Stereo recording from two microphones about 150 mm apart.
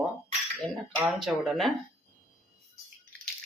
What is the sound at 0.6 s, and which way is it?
Speech, centre (ahead or behind).